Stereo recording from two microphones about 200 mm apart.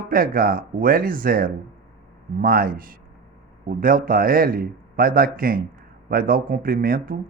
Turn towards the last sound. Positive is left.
turn(degrees=-45)  # may be behind; listen again after turning